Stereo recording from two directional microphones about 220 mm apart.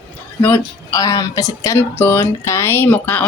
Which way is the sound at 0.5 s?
20° left (ahead or behind).